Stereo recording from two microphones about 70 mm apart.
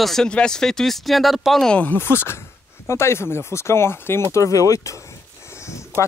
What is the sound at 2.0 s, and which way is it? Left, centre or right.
Speech, left.